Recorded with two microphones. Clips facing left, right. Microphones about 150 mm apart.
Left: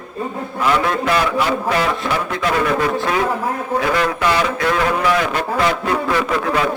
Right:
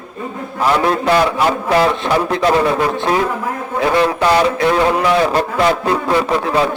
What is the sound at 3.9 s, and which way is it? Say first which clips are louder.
A man's voice: right 7 dB; 30° right (ahead or behind).